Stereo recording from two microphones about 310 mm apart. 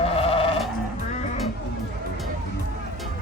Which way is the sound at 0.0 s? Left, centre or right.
Centre.